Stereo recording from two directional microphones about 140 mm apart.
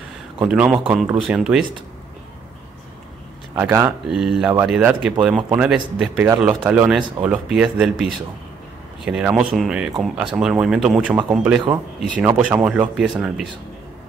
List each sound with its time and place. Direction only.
0.4 s speech: 10° right (ahead or behind)
3.5 s speech: 15° right (ahead or behind)
4.1 s speech: 5° right (ahead or behind)